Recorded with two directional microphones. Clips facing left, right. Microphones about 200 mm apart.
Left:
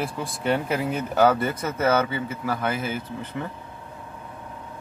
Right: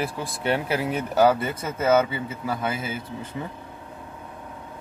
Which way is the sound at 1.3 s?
25° right (ahead or behind).